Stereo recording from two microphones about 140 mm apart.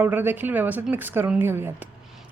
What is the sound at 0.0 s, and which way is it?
Speech, 15° right (ahead or behind).